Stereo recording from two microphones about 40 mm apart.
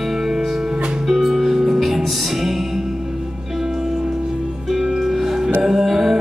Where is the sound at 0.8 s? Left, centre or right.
Right.